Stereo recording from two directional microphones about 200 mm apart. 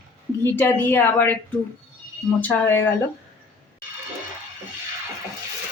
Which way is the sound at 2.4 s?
10° left (ahead or behind).